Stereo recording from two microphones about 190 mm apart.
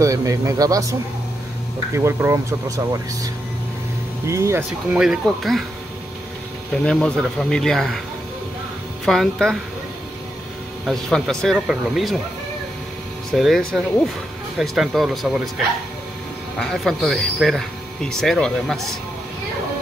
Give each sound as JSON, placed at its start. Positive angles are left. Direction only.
{"t": 0.0, "sound": "speech", "side_deg": -15}
{"t": 2.0, "sound": "speech", "side_deg": -15}
{"t": 4.3, "sound": "speech", "side_deg": -15}
{"t": 6.7, "sound": "speech", "side_deg": 5}
{"t": 9.0, "sound": "speech", "side_deg": 0}
{"t": 10.9, "sound": "speech", "side_deg": 0}
{"t": 13.3, "sound": "speech", "side_deg": 0}